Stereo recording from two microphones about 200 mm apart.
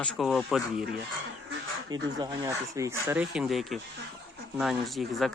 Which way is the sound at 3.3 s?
Centre (ahead or behind).